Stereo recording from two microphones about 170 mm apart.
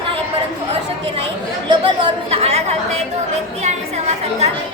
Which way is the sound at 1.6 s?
30° right (ahead or behind).